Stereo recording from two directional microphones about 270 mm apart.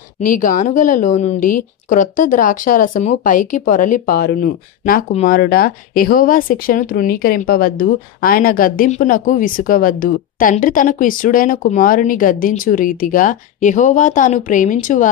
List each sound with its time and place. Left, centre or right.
0.2 s a woman's voice: left